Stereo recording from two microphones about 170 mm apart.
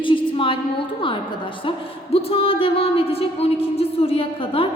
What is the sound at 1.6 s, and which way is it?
A woman's voice, 35° left (ahead or behind).